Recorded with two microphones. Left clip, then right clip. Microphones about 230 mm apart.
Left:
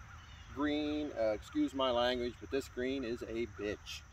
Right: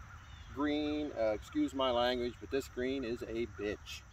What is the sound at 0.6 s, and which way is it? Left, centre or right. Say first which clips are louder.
Speech: right 1 dB; centre.